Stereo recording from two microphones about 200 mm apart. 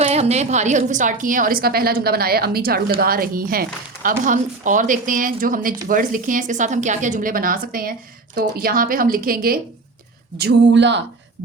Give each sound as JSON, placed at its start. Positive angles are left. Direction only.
{"t": 0.0, "sound": "a woman's voice", "side_deg": -35}
{"t": 10.3, "sound": "speech", "side_deg": -55}